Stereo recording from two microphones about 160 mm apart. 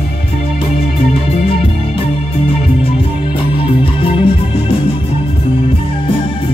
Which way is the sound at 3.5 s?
35° left (ahead or behind).